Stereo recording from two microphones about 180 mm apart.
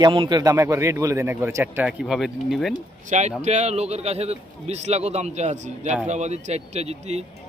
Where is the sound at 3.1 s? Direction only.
40° right (ahead or behind).